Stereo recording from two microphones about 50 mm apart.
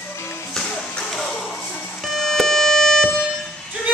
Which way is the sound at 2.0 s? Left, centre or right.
Centre.